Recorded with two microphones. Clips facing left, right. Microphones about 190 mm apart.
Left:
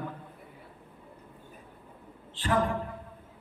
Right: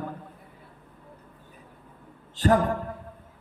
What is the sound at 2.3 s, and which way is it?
Speech, 45° right (ahead or behind).